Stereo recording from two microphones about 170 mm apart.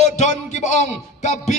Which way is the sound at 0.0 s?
45° left (ahead or behind).